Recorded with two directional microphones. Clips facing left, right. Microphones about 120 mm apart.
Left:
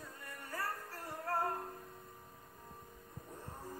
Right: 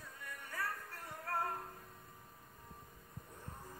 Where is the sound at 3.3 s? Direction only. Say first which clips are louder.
Left 5 dB; 30° left (ahead or behind).